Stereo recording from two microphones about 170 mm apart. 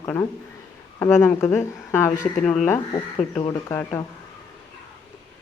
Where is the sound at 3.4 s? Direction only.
20° left (ahead or behind).